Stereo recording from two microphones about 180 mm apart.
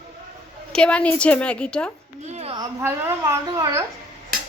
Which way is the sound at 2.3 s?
35° right (ahead or behind).